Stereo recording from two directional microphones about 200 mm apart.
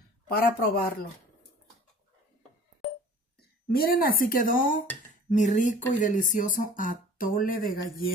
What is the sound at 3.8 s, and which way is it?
Speech, 45° left (ahead or behind).